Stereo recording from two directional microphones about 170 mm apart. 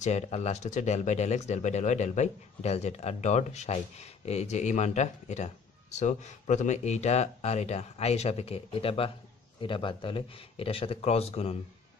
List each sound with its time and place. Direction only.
0.0 s speech: 40° left (ahead or behind)